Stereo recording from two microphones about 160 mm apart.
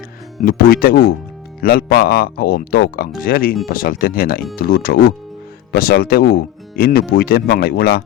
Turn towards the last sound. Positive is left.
turn(degrees=75)  # may be behind; listen again after turning